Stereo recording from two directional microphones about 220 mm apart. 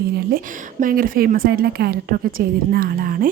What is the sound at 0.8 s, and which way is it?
A woman's voice, 40° right (ahead or behind).